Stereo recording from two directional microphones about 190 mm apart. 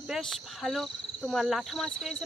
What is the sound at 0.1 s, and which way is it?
Speech, centre (ahead or behind).